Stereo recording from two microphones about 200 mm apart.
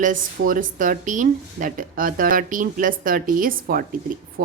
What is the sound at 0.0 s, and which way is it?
A woman's voice, 40° right (ahead or behind).